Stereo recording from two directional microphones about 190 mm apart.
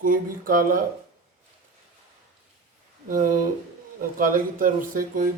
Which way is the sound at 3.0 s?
45° right (ahead or behind).